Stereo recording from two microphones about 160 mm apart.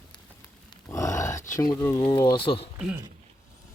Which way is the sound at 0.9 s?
20° left (ahead or behind).